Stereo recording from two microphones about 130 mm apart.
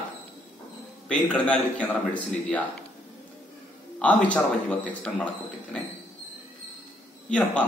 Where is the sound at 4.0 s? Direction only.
10° left (ahead or behind).